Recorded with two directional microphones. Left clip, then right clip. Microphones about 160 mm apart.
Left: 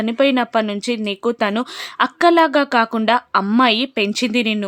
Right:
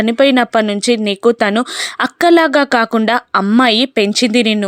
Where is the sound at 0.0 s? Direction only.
30° right (ahead or behind).